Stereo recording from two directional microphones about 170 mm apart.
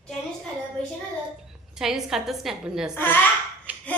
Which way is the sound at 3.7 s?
10° right (ahead or behind).